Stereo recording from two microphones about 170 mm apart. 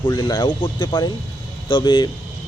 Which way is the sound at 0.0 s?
25° left (ahead or behind).